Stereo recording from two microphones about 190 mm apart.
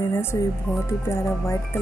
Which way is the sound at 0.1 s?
15° left (ahead or behind).